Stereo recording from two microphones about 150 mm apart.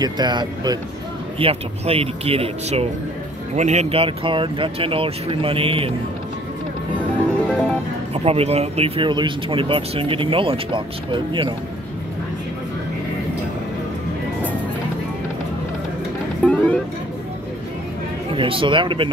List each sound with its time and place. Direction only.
0.0 s speech: 30° right (ahead or behind)
1.4 s speech: 40° right (ahead or behind)
7.4 s music: 5° left (ahead or behind)
8.1 s speech: 40° right (ahead or behind)
16.4 s music: 10° left (ahead or behind)
18.3 s speech: 35° right (ahead or behind)